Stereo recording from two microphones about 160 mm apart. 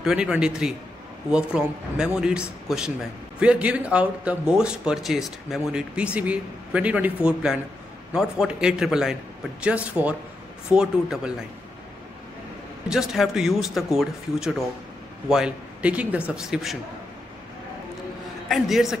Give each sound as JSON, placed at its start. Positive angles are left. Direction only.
{"t": 0.0, "sound": "speech", "side_deg": -5}
{"t": 8.1, "sound": "speech", "side_deg": -5}
{"t": 12.8, "sound": "speech", "side_deg": -5}
{"t": 18.5, "sound": "speech", "side_deg": 0}